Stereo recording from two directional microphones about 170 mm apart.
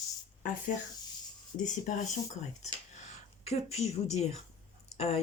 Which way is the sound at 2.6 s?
40° left (ahead or behind).